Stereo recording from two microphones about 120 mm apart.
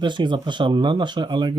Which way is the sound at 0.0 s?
40° right (ahead or behind).